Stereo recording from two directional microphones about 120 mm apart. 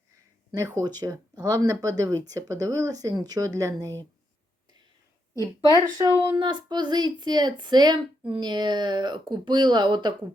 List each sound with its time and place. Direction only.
0.5 s speech: 25° right (ahead or behind)
5.7 s speech: 25° right (ahead or behind)
6.3 s speech: 40° right (ahead or behind)